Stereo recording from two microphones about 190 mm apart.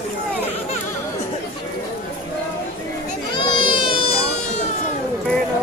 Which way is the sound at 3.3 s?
25° left (ahead or behind).